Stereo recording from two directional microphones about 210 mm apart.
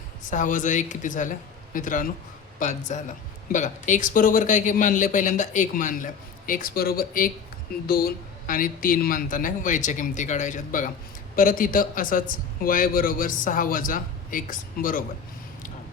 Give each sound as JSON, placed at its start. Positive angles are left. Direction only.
{"t": 0.3, "sound": "a man's voice", "side_deg": 35}